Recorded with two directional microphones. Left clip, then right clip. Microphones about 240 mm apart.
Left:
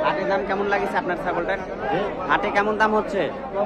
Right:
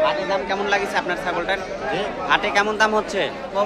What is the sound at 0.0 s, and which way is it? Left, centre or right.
A man's voice, centre.